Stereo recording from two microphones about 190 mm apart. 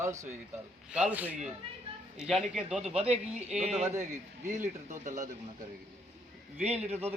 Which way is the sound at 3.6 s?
35° right (ahead or behind).